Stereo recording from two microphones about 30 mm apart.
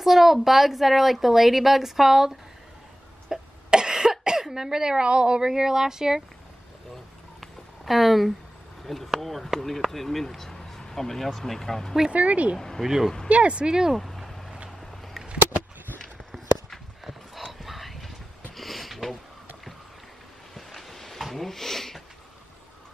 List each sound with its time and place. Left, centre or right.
0.0 s a woman's voice: centre
3.3 s cough: centre
4.4 s speech: centre
5.5 s speech: centre
7.3 s a sound: centre
8.8 s speech: centre
12.1 s speech: right
12.5 s speech: centre
12.8 s a woman's voice: centre
13.3 s speech: right
13.9 s vehicle: centre
17.0 s horse: centre
18.6 s a sound: centre
20.7 s a sound: centre